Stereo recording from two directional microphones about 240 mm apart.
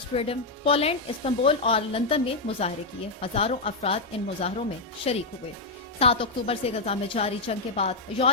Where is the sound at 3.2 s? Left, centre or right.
Left.